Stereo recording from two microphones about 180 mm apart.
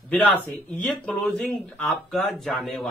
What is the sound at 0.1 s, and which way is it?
Speech, 10° left (ahead or behind).